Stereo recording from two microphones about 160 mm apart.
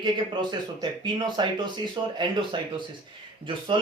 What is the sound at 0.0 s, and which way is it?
Speech, 30° right (ahead or behind).